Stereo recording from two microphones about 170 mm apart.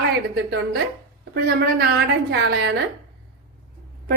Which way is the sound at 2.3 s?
80° right.